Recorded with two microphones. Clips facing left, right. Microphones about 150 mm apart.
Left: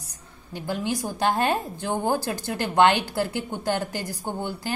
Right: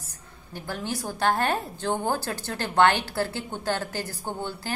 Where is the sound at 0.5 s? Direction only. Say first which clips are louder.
Left 4 dB; 15° left (ahead or behind).